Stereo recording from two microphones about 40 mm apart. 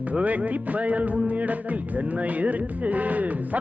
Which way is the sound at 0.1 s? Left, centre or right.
Right.